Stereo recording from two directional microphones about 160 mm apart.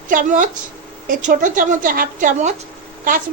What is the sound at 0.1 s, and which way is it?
A woman's voice, 55° right (ahead or behind).